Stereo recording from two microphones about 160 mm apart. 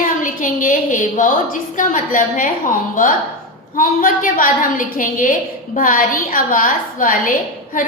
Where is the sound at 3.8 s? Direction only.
60° left (ahead or behind).